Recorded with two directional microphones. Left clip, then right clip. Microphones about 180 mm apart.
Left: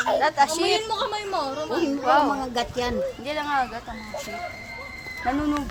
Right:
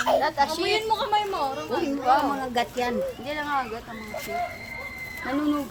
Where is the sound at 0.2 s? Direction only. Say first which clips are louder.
Left 3 dB; 50° left (ahead or behind).